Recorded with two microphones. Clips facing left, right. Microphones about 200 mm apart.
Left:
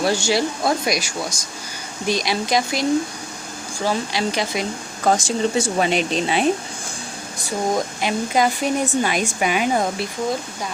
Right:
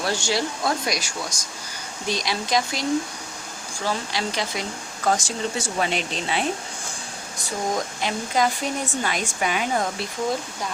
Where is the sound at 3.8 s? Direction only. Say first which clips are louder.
Left 5 dB; 15° left (ahead or behind).